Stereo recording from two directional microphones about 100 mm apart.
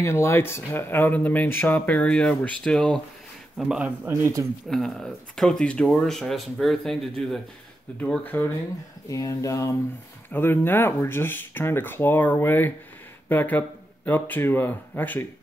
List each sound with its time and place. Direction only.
0.0 s speech: 25° left (ahead or behind); by 3.0 s 5° left (ahead or behind)
3.5 s speech: 10° right (ahead or behind)
4.1 s a man's voice: 30° right (ahead or behind)
4.6 s speech: 5° left (ahead or behind)
8.0 s speech: 15° left (ahead or behind)
9.1 s a sound: 35° left (ahead or behind)
10.3 s speech: 20° left (ahead or behind)